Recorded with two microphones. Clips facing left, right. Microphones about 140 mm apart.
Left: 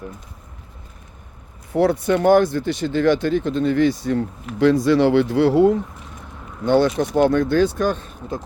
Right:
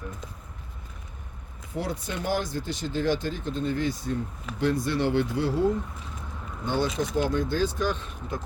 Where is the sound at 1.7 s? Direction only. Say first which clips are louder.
Left 14 dB; 70° left (ahead or behind); by 8.1 s 50° left (ahead or behind).